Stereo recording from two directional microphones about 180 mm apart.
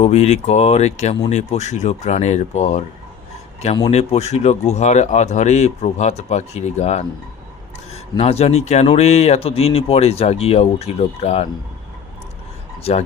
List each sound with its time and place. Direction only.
0.0 s speech: 35° left (ahead or behind)
3.8 s speech: 35° left (ahead or behind)
8.2 s speech: 35° left (ahead or behind)
12.8 s speech: 35° left (ahead or behind)